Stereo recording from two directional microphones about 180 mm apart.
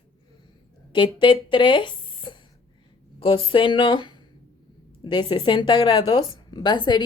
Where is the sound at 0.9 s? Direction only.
25° left (ahead or behind).